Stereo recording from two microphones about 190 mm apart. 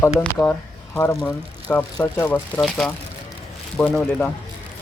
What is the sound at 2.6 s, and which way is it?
Speech, 5° left (ahead or behind).